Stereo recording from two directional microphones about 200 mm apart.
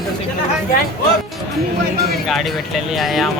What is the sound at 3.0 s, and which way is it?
Speech, centre (ahead or behind).